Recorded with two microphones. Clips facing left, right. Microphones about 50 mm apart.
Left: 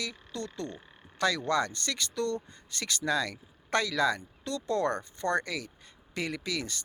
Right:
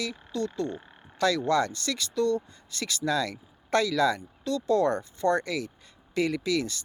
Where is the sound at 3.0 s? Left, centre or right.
Left.